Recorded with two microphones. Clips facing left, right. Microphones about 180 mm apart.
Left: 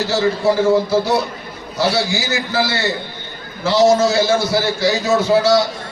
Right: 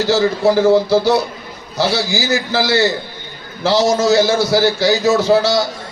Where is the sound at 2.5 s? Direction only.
75° right (ahead or behind).